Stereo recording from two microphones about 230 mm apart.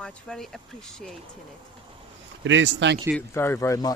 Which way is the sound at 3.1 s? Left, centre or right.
Centre.